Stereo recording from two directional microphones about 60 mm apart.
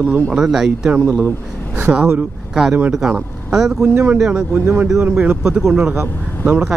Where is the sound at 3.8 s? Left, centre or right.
Right.